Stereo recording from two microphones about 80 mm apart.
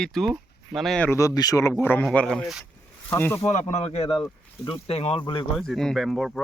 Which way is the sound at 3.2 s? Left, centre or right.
Left.